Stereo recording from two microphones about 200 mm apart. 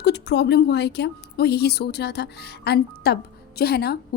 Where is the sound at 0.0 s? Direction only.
55° left (ahead or behind).